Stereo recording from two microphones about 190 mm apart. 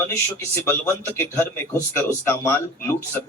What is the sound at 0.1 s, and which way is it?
Speech, 15° left (ahead or behind).